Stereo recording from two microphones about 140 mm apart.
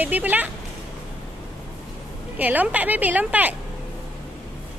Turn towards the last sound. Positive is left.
turn(degrees=-10)  # may be behind; listen again after turning